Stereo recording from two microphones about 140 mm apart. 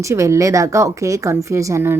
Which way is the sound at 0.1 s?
20° right (ahead or behind).